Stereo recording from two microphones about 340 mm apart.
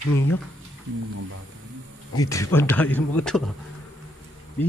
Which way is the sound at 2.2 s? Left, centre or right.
Centre.